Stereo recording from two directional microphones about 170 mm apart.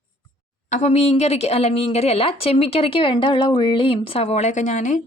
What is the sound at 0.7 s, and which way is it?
A woman's voice, 45° left (ahead or behind).